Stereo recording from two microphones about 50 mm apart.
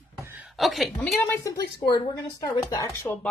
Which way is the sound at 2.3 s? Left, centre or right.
Left.